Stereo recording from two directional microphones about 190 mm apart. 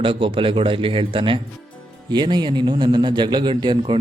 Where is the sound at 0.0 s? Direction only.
30° right (ahead or behind).